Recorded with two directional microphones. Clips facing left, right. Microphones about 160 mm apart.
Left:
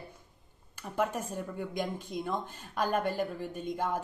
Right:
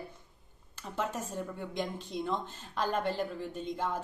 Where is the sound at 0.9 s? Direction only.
10° left (ahead or behind).